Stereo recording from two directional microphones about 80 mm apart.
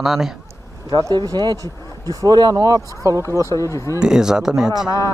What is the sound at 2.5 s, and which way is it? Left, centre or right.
Speech, right.